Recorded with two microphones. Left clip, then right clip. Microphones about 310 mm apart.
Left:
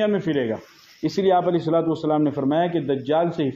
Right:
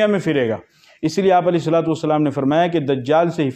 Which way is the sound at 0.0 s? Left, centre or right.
Right.